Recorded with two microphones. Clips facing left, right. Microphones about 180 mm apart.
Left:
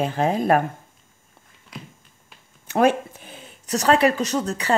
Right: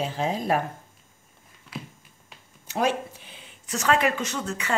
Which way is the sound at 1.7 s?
5° right (ahead or behind).